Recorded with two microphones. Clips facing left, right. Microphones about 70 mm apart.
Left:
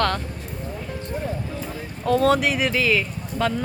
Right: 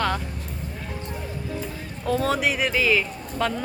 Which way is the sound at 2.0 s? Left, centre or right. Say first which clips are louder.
Left 4 dB; centre.